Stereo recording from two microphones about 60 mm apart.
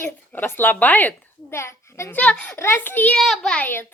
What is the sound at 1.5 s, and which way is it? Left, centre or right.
Speech, left.